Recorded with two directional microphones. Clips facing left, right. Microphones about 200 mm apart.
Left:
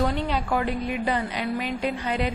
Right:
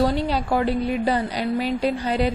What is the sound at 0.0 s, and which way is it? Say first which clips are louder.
A woman's voice: right 4 dB; 35° right (ahead or behind).